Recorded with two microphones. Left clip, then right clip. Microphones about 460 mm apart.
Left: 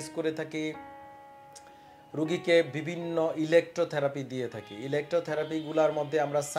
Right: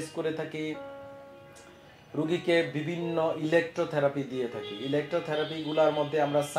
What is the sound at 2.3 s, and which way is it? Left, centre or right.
Speech, left.